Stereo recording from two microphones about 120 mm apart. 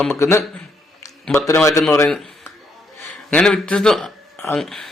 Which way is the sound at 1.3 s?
20° left (ahead or behind).